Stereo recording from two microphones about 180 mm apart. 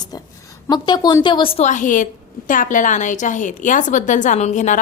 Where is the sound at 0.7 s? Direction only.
25° left (ahead or behind).